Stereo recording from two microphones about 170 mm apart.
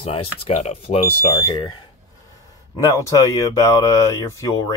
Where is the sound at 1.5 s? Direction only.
30° left (ahead or behind).